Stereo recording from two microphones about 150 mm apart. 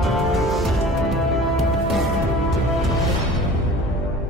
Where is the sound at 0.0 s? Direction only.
Centre (ahead or behind).